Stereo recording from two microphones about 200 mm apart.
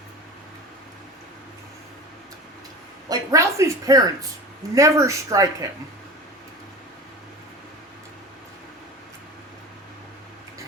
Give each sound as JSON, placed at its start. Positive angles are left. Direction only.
{"t": 3.1, "sound": "a woman's voice", "side_deg": -15}